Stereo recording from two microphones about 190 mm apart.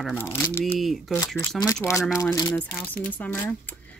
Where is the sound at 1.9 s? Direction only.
15° left (ahead or behind).